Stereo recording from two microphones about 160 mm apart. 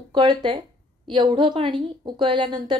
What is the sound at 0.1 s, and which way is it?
A woman's voice, 30° right (ahead or behind).